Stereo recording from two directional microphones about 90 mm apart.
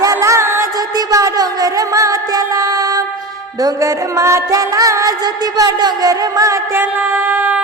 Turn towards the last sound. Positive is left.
turn(degrees=-20)  # may be behind; listen again after turning